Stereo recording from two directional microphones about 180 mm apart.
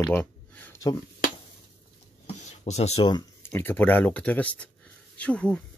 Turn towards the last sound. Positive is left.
turn(degrees=5)  # may be behind; listen again after turning